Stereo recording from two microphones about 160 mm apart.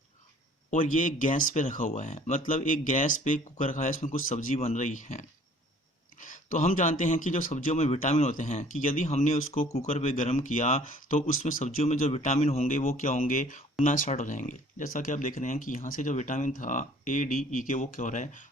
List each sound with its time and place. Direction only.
0.7 s speech: 55° left (ahead or behind)